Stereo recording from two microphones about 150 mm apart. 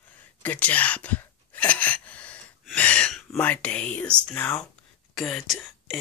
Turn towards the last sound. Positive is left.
turn(degrees=0)  # may be behind; listen again after turning